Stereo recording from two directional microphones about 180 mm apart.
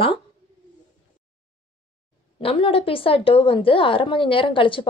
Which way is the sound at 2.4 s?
30° left (ahead or behind).